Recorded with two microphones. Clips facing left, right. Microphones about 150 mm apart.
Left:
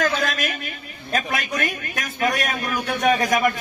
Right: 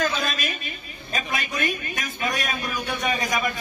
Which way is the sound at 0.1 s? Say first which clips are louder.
Left 4 dB; 75° left (ahead or behind).